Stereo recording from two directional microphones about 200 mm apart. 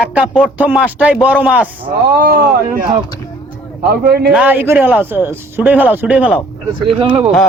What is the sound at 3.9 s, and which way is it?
Speech, 50° right (ahead or behind).